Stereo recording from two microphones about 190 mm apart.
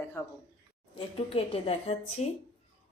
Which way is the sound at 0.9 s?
30° left (ahead or behind).